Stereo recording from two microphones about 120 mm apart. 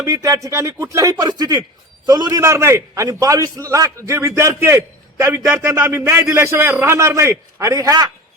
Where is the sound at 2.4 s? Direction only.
25° right (ahead or behind).